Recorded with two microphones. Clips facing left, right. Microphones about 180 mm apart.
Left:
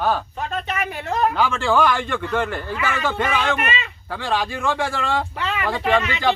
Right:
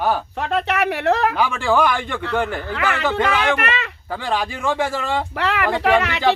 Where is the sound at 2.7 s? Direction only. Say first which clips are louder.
Right 3 dB; 65° right (ahead or behind).